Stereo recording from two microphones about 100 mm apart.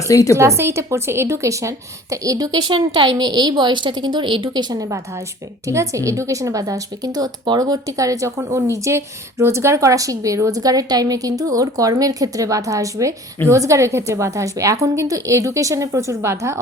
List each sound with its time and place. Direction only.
0.3 s a woman's voice: 30° right (ahead or behind); by 4.6 s 55° right (ahead or behind)
4.7 s speech: 35° right (ahead or behind)